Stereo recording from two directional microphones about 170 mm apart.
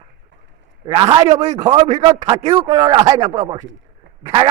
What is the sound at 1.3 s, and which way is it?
A man's voice, 40° right (ahead or behind).